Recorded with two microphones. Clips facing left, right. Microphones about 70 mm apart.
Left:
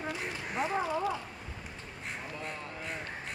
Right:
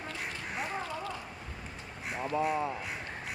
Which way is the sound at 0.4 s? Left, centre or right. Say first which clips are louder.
Left 5 dB; centre.